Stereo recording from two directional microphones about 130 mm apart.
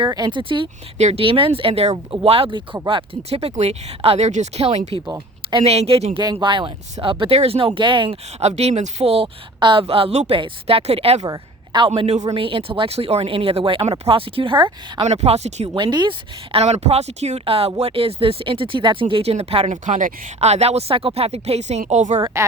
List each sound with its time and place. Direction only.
0.1 s speech: 35° right (ahead or behind)
0.9 s speech: 60° right (ahead or behind)
1.2 s speech: 45° right (ahead or behind)
6.3 s speech: 40° right (ahead or behind)
8.4 s speech: 55° right (ahead or behind)
11.3 s a sound: 35° right (ahead or behind)
11.9 s speech: 55° right (ahead or behind)
12.3 s speech: 45° right (ahead or behind)
15.0 s speech: 55° right (ahead or behind)
15.7 s speech: 35° right (ahead or behind); by 20.1 s 80° right
20.4 s speech: 55° right (ahead or behind)